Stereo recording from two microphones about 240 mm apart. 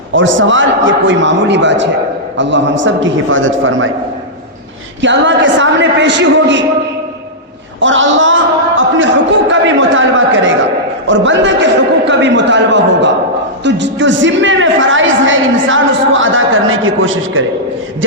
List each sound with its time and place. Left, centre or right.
0.1 s a woman's voice: right
5.0 s a woman's voice: right
7.8 s a man's voice: right
9.5 s a woman's voice: right